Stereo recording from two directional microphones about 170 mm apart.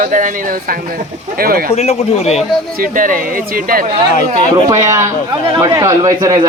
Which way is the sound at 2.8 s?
50° right (ahead or behind).